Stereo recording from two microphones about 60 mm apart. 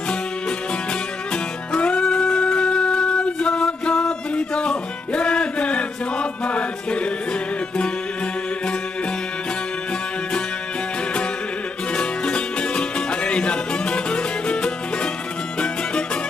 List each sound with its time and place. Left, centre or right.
1.3 s music: centre
11.9 s music: centre